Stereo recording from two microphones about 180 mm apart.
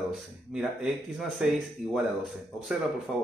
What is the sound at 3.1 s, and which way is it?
Speech, 5° right (ahead or behind).